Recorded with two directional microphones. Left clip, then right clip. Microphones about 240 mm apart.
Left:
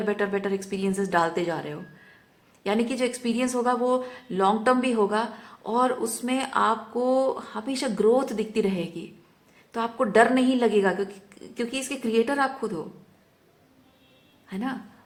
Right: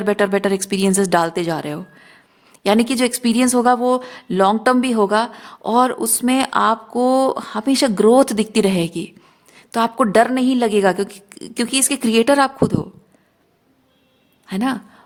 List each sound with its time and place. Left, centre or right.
0.0 s speech: right
14.4 s a woman's voice: right